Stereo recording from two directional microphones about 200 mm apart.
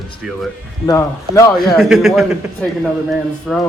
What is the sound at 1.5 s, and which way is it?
Speech, centre (ahead or behind).